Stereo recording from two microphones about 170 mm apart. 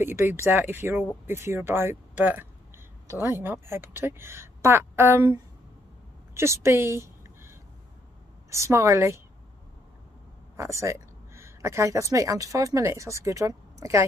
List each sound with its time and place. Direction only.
0.0 s a woman's voice: 15° right (ahead or behind)
10.5 s speech: 15° right (ahead or behind)